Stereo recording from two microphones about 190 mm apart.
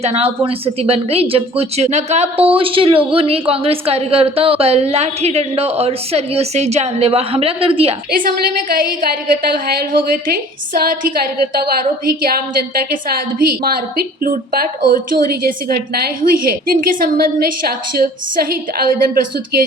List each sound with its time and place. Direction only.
0.0 s speech: 35° right (ahead or behind)
8.7 s a woman's voice: 50° right (ahead or behind)
10.8 s a woman's voice: 50° right (ahead or behind)